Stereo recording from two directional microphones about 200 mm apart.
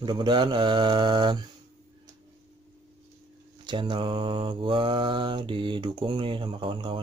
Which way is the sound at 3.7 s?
25° right (ahead or behind).